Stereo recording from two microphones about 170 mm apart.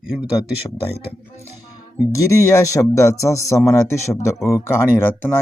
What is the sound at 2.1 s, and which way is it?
Speech, 20° left (ahead or behind).